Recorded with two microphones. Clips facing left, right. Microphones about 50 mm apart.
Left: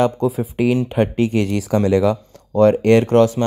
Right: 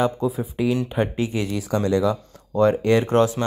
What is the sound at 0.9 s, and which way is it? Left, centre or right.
Speech, left.